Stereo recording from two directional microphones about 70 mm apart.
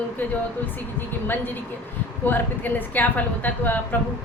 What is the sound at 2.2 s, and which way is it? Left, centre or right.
A woman's voice, left.